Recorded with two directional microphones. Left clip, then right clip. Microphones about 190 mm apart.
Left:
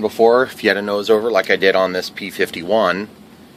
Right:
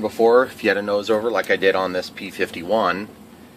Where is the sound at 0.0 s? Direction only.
40° left (ahead or behind).